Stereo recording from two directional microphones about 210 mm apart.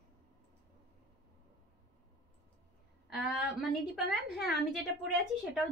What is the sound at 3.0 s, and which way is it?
A woman's voice, centre (ahead or behind).